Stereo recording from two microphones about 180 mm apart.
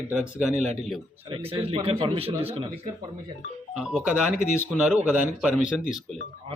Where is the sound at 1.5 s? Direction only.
35° right (ahead or behind).